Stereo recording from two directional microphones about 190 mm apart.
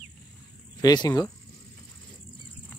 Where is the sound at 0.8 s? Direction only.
20° left (ahead or behind).